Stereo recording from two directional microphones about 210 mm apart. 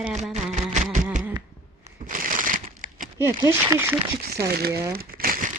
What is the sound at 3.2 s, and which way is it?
Speech, 15° right (ahead or behind).